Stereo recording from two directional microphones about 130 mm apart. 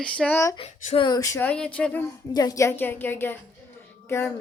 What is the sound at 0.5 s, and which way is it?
Speech, 50° left (ahead or behind).